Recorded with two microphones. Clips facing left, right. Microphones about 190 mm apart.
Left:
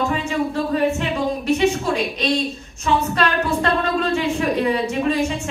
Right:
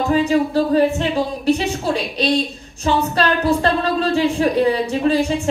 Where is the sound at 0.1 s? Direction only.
35° right (ahead or behind).